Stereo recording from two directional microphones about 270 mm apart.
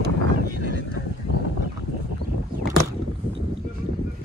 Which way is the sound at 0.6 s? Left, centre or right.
Right.